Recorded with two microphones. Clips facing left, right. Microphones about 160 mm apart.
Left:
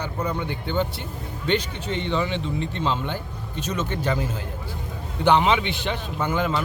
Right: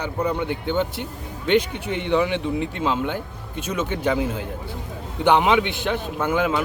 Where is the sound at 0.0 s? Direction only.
10° right (ahead or behind).